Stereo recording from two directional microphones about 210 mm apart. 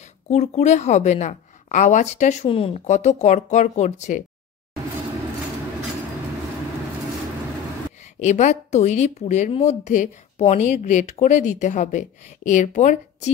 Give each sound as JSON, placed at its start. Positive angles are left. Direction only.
{"t": 0.0, "sound": "a woman's voice", "side_deg": 30}
{"t": 8.0, "sound": "a woman's voice", "side_deg": 35}